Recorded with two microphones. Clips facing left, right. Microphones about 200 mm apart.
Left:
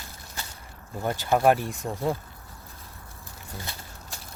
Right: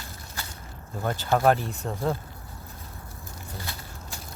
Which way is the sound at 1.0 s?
15° left (ahead or behind).